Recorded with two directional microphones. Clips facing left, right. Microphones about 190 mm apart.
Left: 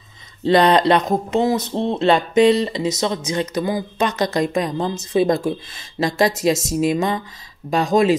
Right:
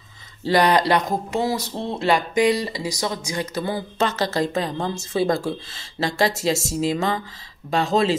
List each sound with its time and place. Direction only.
0.4 s speech: 25° left (ahead or behind)